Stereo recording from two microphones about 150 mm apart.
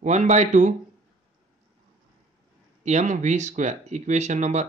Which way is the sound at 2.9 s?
50° right (ahead or behind).